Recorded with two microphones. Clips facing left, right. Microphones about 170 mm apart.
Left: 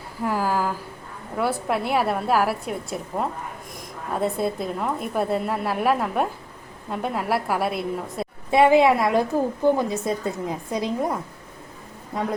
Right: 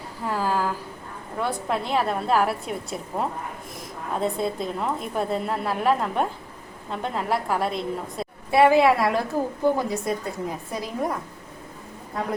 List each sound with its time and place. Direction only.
0.3 s a sound: 10° left (ahead or behind)
1.4 s a woman's voice: 10° left (ahead or behind)
4.4 s a woman's voice: 5° left (ahead or behind)
8.4 s a woman's voice: 20° left (ahead or behind)